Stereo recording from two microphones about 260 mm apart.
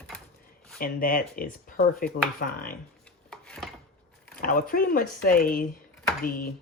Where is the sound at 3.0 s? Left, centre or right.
Centre.